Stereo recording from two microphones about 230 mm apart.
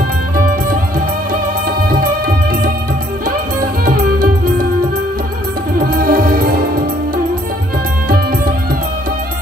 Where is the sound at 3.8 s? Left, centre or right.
Right.